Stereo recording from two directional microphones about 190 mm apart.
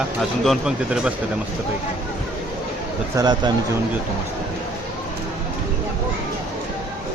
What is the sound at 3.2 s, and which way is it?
Speech, 20° right (ahead or behind).